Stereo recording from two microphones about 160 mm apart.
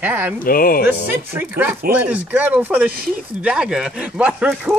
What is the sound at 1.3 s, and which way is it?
Speech, 10° right (ahead or behind).